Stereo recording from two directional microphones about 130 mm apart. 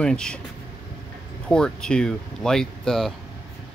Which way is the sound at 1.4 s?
5° left (ahead or behind).